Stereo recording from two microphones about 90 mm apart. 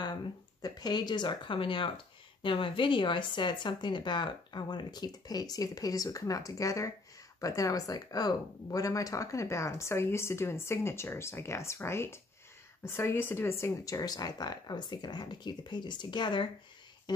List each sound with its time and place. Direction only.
0.6 s speech: 45° left (ahead or behind)